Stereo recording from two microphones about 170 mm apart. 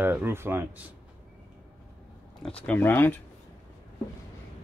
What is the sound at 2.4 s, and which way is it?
Speech, 5° left (ahead or behind).